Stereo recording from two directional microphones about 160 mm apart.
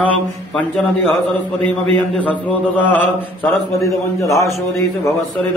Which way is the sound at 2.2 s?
10° left (ahead or behind).